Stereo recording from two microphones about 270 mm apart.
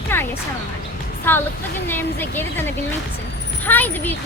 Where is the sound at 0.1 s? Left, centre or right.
Centre.